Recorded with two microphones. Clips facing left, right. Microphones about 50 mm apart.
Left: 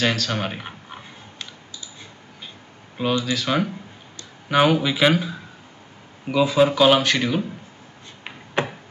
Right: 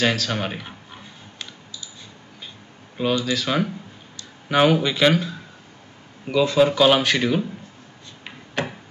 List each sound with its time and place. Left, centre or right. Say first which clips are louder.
0.0 s speech: right 1 dB; centre
3.0 s speech: right 1 dB; centre
8.6 s tick-tock: left 3 dB; left